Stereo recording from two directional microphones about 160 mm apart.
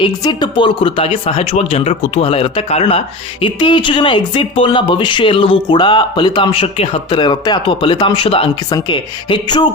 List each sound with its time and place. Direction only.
0.0 s speech: 25° left (ahead or behind)